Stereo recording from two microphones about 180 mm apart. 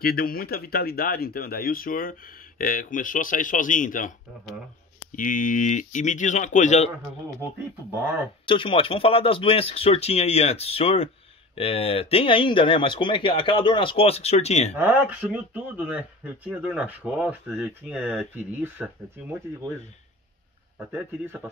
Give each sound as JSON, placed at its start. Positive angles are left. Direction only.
{"t": 0.0, "sound": "speech", "side_deg": 55}
{"t": 5.1, "sound": "speech", "side_deg": 50}
{"t": 8.5, "sound": "speech", "side_deg": 30}
{"t": 14.8, "sound": "speech", "side_deg": -10}
{"t": 20.9, "sound": "speech", "side_deg": -10}